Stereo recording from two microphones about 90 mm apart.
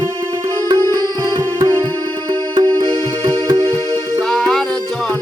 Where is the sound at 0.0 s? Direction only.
50° right (ahead or behind).